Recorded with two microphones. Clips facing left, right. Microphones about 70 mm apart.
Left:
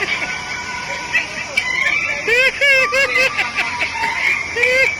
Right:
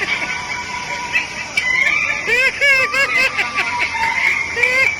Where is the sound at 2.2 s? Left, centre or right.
Centre.